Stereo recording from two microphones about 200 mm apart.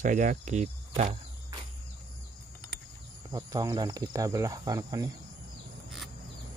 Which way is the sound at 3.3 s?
20° right (ahead or behind).